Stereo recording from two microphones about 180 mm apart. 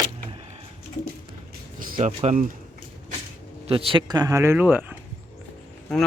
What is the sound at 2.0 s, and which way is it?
Speech, 40° right (ahead or behind).